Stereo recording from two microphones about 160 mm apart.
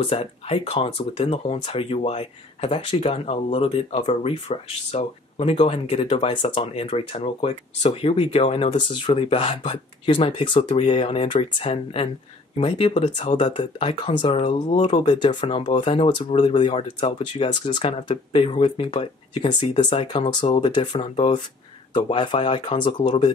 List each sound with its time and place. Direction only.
0.0 s speech: 40° left (ahead or behind)